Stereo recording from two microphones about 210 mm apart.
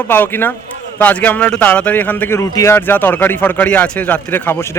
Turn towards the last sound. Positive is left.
turn(degrees=10)  # may be behind; listen again after turning